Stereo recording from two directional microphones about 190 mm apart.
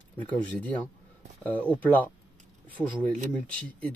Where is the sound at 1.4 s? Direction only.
10° left (ahead or behind).